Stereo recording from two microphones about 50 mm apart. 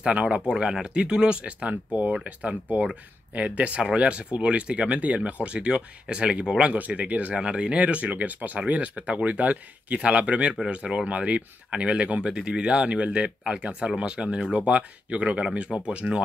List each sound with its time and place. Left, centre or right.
0.0 s speech: right
0.5 s speech: centre
7.3 s speech: centre